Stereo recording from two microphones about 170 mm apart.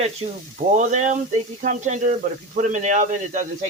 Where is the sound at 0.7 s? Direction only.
45° right (ahead or behind).